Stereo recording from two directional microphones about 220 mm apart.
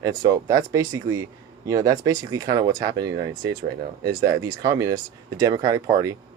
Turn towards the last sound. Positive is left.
turn(degrees=-15)  # may be behind; listen again after turning